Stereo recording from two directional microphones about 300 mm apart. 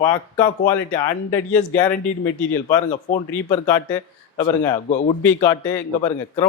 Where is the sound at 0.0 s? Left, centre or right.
Centre.